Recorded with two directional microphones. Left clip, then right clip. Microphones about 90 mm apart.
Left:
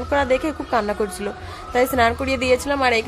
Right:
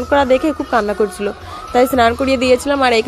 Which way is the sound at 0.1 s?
35° right (ahead or behind).